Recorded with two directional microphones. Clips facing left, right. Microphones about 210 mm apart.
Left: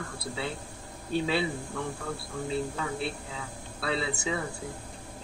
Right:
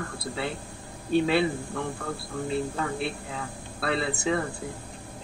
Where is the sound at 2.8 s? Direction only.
55° right (ahead or behind).